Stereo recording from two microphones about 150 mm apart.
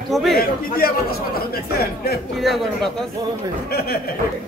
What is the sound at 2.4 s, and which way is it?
Speech, centre (ahead or behind).